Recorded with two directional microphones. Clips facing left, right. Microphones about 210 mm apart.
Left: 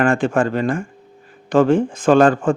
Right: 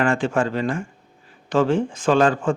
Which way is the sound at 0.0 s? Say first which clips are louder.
Left 4 dB; 55° left (ahead or behind).